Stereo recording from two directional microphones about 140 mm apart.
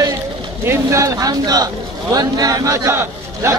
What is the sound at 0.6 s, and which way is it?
Chant, 20° right (ahead or behind).